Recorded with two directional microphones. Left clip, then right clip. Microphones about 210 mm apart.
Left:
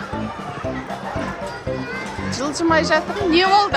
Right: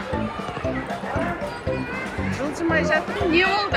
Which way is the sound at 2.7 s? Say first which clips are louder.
Left 4 dB; 25° left (ahead or behind).